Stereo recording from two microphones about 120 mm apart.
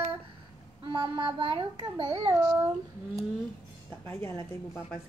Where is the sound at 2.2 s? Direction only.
20° right (ahead or behind).